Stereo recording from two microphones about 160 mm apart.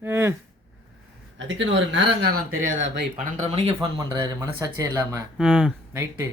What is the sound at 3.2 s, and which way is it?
Speech, 45° right (ahead or behind).